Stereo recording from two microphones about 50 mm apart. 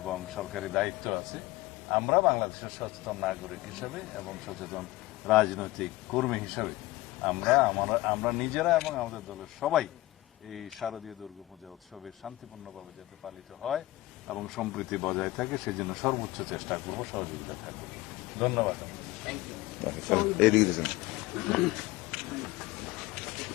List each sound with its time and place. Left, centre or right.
0.0 s a man's voice: centre
13.2 s a man's voice: centre